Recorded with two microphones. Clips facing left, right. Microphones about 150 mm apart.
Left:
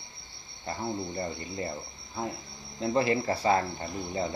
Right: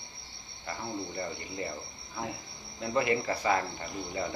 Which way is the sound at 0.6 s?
30° left (ahead or behind).